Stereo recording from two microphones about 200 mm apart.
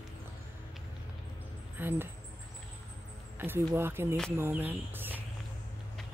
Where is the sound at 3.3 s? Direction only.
10° right (ahead or behind).